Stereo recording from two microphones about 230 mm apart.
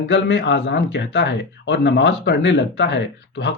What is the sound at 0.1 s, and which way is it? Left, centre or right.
Speech, left.